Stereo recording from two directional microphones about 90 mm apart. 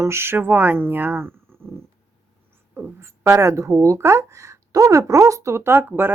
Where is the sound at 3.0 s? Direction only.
30° right (ahead or behind).